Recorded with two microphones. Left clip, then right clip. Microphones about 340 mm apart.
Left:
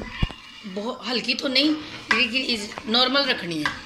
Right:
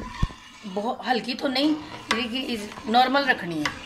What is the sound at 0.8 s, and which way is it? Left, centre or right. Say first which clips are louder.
Speech: even; right.